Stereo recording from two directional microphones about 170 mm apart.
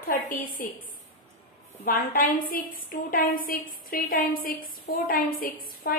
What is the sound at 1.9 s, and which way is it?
A woman's voice, 55° left (ahead or behind).